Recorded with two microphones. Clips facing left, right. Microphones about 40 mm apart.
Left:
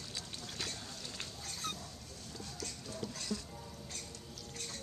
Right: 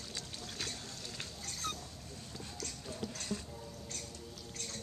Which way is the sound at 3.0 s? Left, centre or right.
Right.